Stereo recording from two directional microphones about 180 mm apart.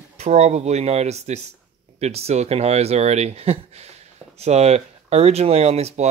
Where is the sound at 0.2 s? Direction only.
40° right (ahead or behind).